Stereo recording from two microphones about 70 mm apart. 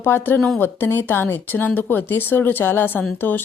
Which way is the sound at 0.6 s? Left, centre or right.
Left.